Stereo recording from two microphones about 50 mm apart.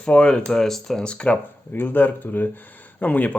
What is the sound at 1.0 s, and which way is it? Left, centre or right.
Speech, left.